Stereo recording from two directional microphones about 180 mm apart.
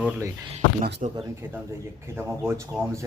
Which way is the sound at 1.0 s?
40° right (ahead or behind).